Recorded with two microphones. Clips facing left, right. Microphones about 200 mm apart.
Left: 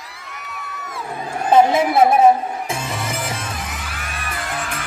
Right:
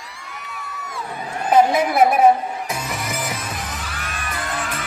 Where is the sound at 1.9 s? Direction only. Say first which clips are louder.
Left 1 dB; 25° left (ahead or behind).